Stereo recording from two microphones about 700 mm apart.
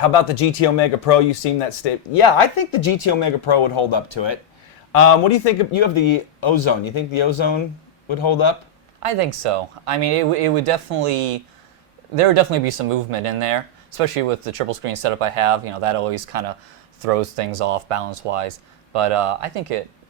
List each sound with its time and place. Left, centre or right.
0.0 s speech: left
4.9 s speech: left
9.0 s speech: right